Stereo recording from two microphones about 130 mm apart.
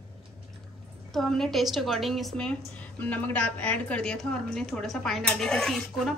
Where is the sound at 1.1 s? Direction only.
Centre (ahead or behind).